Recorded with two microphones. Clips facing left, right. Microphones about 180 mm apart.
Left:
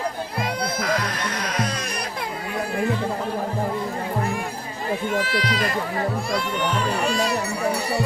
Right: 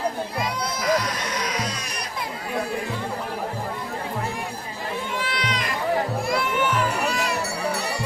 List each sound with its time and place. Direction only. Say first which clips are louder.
0.3 s music: left 2 dB; 55° left (ahead or behind)
5.1 s a sound: left 4 dB; 45° left (ahead or behind)
6.3 s music: right 1 dB; 30° left (ahead or behind)